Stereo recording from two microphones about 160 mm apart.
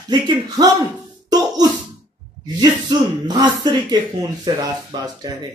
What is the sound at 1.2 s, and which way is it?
Cough, 25° right (ahead or behind).